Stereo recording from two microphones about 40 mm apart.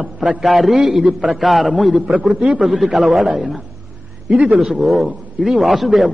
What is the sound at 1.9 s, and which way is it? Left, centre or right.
Speech, right.